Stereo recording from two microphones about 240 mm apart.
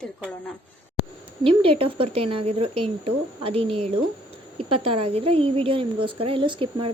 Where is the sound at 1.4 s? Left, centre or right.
Right.